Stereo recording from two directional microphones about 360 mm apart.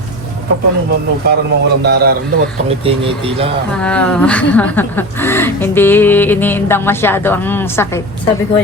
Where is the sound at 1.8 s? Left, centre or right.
Right.